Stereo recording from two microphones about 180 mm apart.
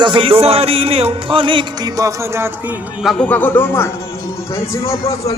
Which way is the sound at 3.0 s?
Centre (ahead or behind).